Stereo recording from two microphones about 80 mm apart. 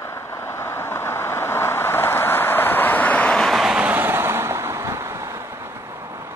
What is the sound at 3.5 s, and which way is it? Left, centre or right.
Vehicle, centre.